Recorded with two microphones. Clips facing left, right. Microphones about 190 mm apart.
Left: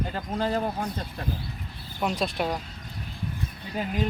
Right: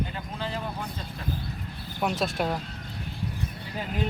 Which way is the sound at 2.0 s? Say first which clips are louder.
Even; centre (ahead or behind).